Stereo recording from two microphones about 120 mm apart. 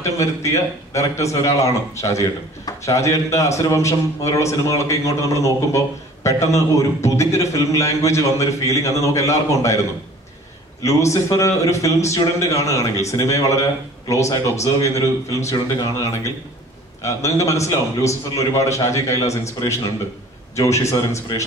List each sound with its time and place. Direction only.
0.0 s a man's voice: 25° left (ahead or behind)
10.8 s a man's voice: 25° left (ahead or behind)
17.0 s a man's voice: 25° left (ahead or behind)
20.5 s a man's voice: 25° left (ahead or behind)